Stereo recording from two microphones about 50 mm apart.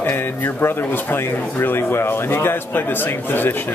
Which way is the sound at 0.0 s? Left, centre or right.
Left.